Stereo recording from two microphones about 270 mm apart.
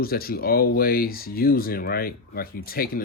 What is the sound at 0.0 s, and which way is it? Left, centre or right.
Speech, left.